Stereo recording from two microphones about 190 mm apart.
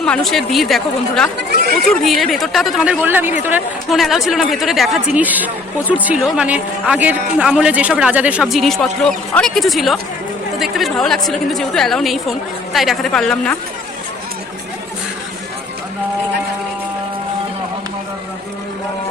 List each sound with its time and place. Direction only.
0.0 s a man's voice: 5° left (ahead or behind)
1.4 s chatter: 55° right (ahead or behind)
2.0 s a man's voice: centre (ahead or behind)